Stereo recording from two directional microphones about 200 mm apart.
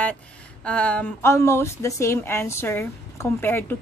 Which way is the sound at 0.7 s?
5° left (ahead or behind).